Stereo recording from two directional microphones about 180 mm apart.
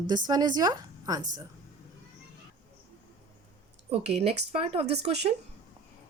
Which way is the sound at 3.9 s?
35° right (ahead or behind).